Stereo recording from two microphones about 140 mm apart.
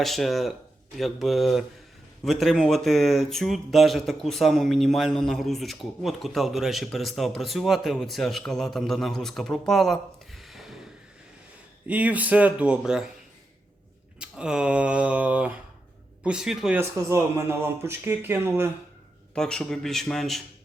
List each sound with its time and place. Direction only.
0.0 s speech: centre (ahead or behind)
11.9 s a man's voice: 10° right (ahead or behind)
14.2 s a man's voice: 5° right (ahead or behind)
19.3 s speech: 5° left (ahead or behind)